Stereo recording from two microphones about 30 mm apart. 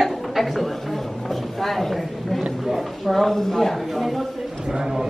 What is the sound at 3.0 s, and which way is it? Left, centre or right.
Speech, centre.